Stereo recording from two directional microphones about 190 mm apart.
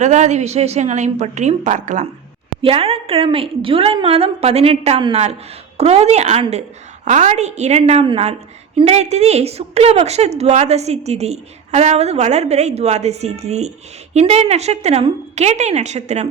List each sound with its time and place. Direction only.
0.0 s a woman's voice: 40° right (ahead or behind)
2.6 s a woman's voice: 30° right (ahead or behind)